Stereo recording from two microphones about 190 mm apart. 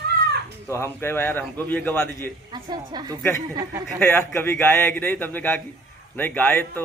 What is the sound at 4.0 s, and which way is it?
A man's voice, 10° left (ahead or behind).